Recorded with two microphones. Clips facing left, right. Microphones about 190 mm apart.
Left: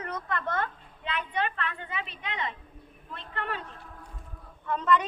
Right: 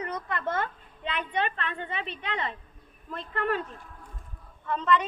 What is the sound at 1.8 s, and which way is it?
A woman's voice, 30° right (ahead or behind).